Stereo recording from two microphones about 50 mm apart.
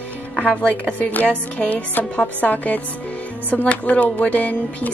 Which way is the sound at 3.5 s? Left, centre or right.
Left.